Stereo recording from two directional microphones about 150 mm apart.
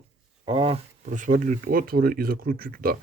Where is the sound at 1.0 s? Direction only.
60° right (ahead or behind).